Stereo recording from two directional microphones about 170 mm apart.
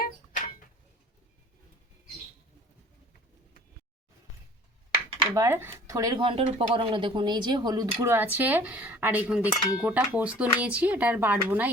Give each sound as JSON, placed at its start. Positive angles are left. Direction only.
{"t": 0.0, "sound": "a sound", "side_deg": 55}
{"t": 5.3, "sound": "speech", "side_deg": -15}
{"t": 7.9, "sound": "speech", "side_deg": -15}